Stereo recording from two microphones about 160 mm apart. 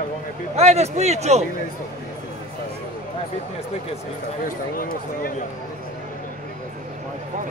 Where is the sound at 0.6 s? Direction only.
45° right (ahead or behind).